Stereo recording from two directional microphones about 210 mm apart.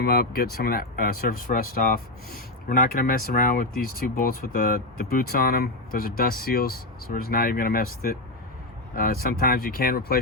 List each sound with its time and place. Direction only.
0.0 s speech: 45° left (ahead or behind)